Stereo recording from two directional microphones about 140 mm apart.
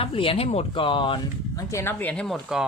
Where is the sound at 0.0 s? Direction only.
40° left (ahead or behind).